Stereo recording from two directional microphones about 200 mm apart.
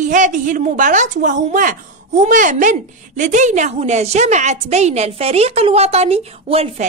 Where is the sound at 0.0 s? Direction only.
40° right (ahead or behind).